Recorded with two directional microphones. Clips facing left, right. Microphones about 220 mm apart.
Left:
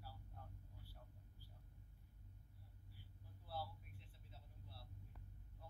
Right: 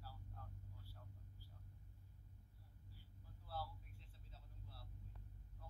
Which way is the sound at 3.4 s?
15° left (ahead or behind).